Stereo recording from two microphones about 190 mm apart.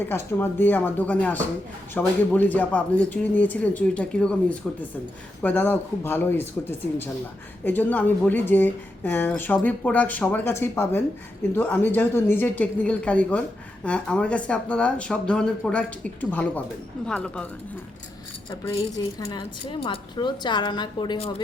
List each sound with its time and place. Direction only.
0.0 s speech: 10° left (ahead or behind)
18.7 s speech: 20° left (ahead or behind)